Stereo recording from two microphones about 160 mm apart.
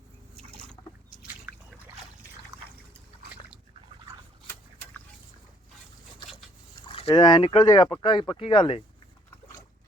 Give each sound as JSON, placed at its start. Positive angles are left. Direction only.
{"t": 1.5, "sound": "boat", "side_deg": -15}
{"t": 6.8, "sound": "speech", "side_deg": 30}